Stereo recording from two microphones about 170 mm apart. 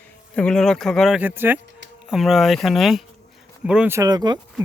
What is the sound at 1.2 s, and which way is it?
Speech, 10° right (ahead or behind).